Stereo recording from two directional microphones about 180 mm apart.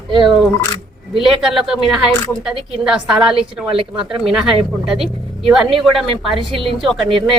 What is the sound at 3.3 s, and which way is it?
Speech, 30° right (ahead or behind).